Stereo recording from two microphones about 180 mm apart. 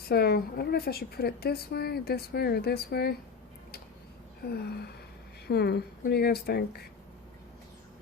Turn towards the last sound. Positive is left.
turn(degrees=60)  # may be behind; listen again after turning